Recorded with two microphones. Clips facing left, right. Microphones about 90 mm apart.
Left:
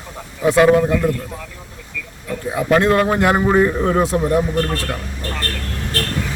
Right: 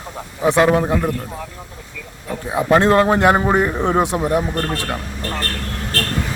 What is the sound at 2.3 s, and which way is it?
A man's voice, 30° right (ahead or behind).